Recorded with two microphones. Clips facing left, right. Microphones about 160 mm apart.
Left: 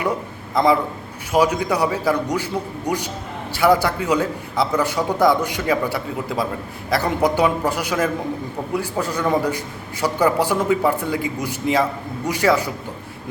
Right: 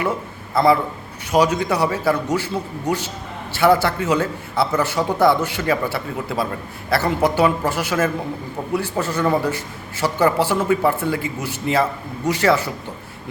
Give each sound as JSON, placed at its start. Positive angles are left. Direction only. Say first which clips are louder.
{"t": 0.5, "sound": "a man's voice", "louder": "right 1 dB", "side_deg": 15}